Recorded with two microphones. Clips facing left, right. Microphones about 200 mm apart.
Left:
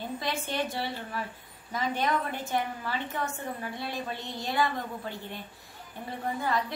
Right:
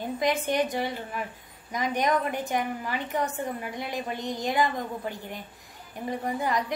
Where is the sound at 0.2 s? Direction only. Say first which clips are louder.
Right 8 dB; 15° right (ahead or behind).